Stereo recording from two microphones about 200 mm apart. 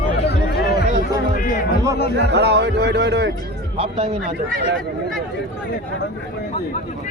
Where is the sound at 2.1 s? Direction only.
60° right (ahead or behind).